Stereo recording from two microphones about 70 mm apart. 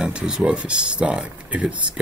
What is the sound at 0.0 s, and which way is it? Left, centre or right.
Speech, centre.